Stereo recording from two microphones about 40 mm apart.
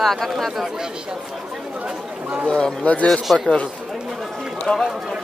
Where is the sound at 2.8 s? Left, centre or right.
Left.